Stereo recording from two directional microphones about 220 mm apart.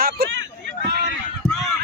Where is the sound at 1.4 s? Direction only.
10° right (ahead or behind).